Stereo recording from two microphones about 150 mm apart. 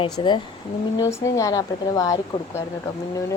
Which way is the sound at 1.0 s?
20° left (ahead or behind).